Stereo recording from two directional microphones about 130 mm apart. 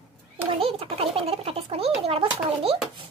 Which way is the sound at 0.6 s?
45° right (ahead or behind).